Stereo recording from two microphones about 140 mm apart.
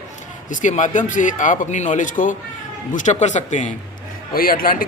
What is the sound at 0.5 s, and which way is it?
A man's voice, 60° left (ahead or behind).